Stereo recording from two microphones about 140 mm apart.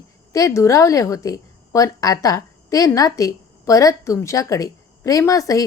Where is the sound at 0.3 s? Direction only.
20° left (ahead or behind).